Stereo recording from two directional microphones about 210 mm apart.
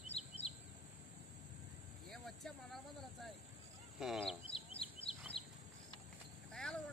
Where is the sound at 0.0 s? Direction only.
30° left (ahead or behind).